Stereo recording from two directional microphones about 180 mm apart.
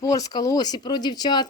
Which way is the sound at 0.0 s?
20° left (ahead or behind).